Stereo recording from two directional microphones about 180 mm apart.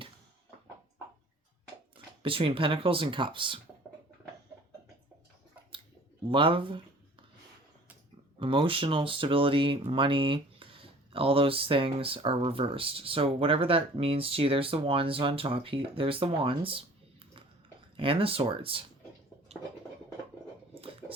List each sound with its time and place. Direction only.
2.2 s speech: 30° right (ahead or behind)
6.2 s a sound: 30° right (ahead or behind)
8.4 s speech: 30° right (ahead or behind)